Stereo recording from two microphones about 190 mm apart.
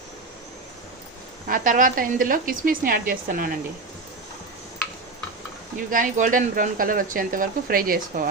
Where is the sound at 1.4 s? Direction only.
45° right (ahead or behind).